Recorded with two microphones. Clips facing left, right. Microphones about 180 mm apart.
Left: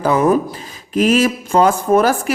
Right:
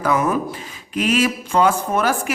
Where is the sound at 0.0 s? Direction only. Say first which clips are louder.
Left 5 dB; 30° left (ahead or behind).